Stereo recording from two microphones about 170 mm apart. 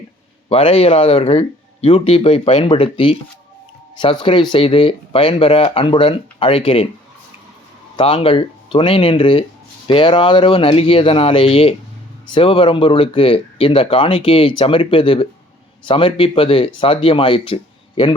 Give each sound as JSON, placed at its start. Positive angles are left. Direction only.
{"t": 0.5, "sound": "speech", "side_deg": 35}
{"t": 7.9, "sound": "speech", "side_deg": 30}